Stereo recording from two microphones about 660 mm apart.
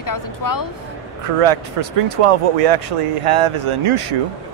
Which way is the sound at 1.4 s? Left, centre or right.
Right.